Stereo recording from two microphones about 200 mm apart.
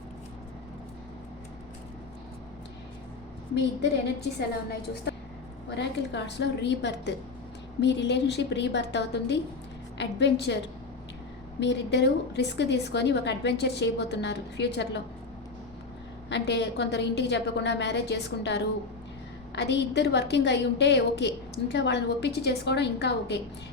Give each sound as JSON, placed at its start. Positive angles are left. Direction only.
{"t": 4.2, "sound": "a woman's voice", "side_deg": 55}
{"t": 11.6, "sound": "a woman's voice", "side_deg": 60}
{"t": 16.3, "sound": "a woman's voice", "side_deg": 60}